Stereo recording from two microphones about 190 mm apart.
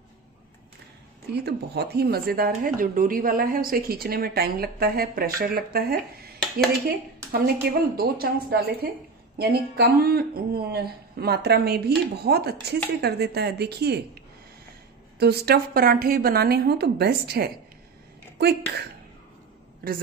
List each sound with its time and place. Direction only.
1.3 s speech: 60° right (ahead or behind)
7.4 s speech: 55° right (ahead or behind)